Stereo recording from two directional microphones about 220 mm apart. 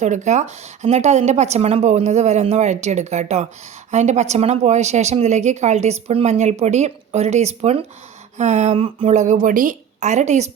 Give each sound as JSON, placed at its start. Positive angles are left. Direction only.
{"t": 0.0, "sound": "a woman's voice", "side_deg": -35}